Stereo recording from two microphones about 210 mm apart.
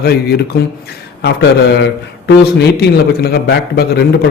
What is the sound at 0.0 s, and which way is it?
Speech, 50° left (ahead or behind).